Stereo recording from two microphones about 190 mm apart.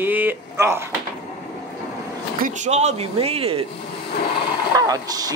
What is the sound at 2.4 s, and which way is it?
Speech, 40° right (ahead or behind).